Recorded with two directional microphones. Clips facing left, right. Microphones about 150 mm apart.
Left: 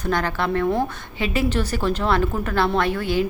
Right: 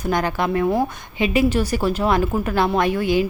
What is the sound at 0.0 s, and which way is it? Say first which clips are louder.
A woman's voice: right 2 dB; 15° right (ahead or behind).